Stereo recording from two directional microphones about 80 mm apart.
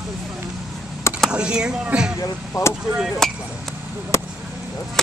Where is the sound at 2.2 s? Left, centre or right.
Left.